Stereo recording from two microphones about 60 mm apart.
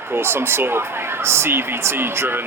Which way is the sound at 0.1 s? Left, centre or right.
Right.